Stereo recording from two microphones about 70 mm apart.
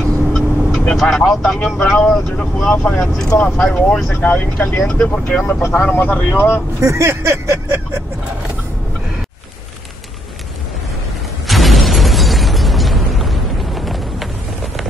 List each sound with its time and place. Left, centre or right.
0.3 s vehicle: centre
1.9 s speech: centre
5.8 s speech: left
6.8 s speech: right
11.4 s explosion: centre